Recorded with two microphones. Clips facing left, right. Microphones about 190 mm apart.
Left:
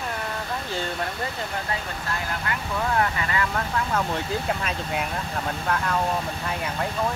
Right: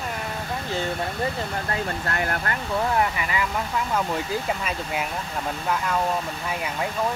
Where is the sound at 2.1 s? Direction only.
65° right (ahead or behind).